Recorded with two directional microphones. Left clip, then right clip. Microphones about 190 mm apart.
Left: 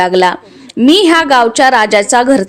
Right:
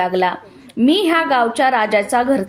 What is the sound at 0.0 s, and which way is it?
A woman's voice, 50° left (ahead or behind).